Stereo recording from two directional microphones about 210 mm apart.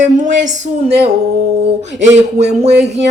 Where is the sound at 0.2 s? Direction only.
35° right (ahead or behind).